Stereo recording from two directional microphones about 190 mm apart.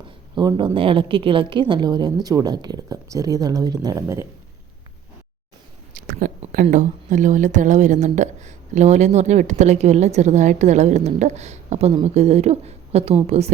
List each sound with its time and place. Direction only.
0.3 s a woman's voice: 25° right (ahead or behind)
5.9 s a sound: 45° right (ahead or behind)
6.4 s speech: 45° right (ahead or behind)